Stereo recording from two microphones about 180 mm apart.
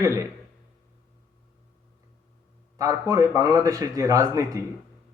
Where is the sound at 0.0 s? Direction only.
15° right (ahead or behind).